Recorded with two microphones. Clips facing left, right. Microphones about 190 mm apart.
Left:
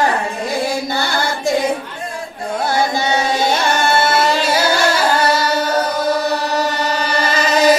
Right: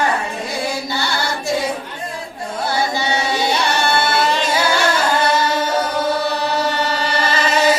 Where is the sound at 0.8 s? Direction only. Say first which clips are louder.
Left 3 dB; 50° left (ahead or behind).